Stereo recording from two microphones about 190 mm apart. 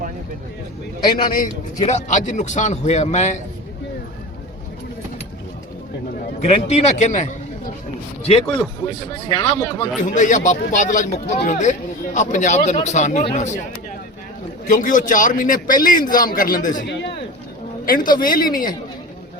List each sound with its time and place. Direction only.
1.2 s a man's voice: 45° left (ahead or behind)
6.4 s a man's voice: 35° left (ahead or behind)
9.3 s speech: 25° left (ahead or behind)
10.2 s a man's voice: 40° left (ahead or behind)
14.7 s a man's voice: 45° left (ahead or behind)
16.9 s a sound: 65° left (ahead or behind)
17.8 s a man's voice: 45° left (ahead or behind)
18.4 s speech: 20° left (ahead or behind)